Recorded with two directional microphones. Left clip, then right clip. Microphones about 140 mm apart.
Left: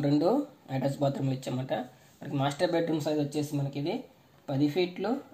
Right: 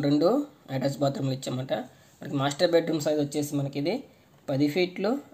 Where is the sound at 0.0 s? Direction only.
35° right (ahead or behind).